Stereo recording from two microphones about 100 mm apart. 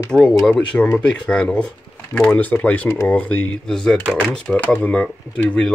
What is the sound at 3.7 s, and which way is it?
Speech, 5° left (ahead or behind).